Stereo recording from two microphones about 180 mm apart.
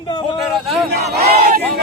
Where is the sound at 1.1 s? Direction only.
60° right (ahead or behind).